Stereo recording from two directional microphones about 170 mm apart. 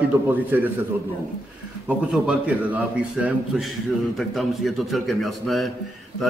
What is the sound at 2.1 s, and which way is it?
A man's voice, 5° right (ahead or behind).